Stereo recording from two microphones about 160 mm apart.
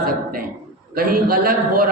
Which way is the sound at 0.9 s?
65° right (ahead or behind).